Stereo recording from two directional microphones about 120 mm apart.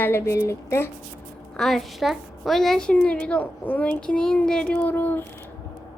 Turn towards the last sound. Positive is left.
turn(degrees=15)  # may be behind; listen again after turning